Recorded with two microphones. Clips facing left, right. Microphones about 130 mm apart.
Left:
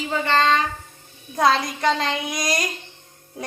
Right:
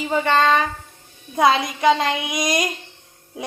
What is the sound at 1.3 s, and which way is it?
A woman's voice, centre (ahead or behind).